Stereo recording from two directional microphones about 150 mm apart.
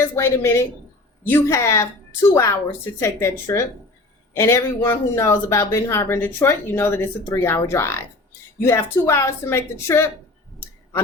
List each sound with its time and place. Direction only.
0.0 s speech: 20° left (ahead or behind)